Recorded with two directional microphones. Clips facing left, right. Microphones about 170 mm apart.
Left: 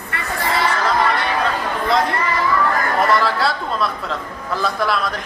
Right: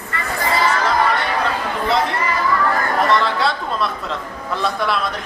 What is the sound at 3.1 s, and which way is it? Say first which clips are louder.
A woman's voice: even; 5° left (ahead or behind).